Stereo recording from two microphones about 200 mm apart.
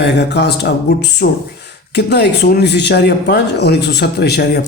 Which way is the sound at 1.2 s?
50° left (ahead or behind).